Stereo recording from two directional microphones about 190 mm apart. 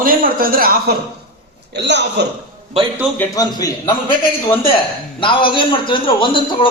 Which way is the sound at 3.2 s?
20° left (ahead or behind).